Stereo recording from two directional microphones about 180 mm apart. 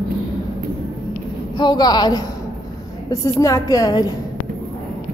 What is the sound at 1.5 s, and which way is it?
A woman's voice, 25° left (ahead or behind).